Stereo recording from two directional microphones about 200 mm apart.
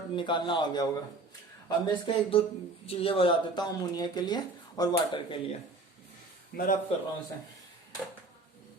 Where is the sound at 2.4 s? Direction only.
25° left (ahead or behind).